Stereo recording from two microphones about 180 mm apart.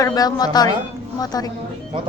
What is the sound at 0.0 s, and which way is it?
A woman's voice, 20° left (ahead or behind).